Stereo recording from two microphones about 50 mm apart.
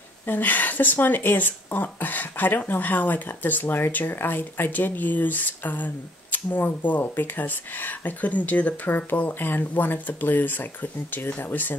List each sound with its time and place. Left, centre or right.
0.3 s speech: left